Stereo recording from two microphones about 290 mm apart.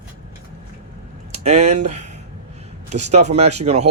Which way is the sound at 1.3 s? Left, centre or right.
Right.